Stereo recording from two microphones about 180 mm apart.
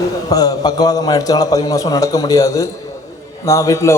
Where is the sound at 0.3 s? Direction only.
20° left (ahead or behind).